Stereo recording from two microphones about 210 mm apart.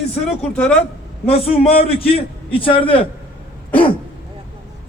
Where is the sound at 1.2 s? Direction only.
30° left (ahead or behind).